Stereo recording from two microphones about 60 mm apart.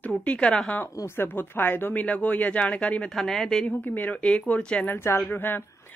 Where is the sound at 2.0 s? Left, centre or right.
Left.